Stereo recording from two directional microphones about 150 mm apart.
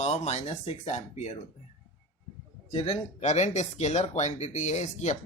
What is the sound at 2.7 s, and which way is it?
Speech, 40° left (ahead or behind).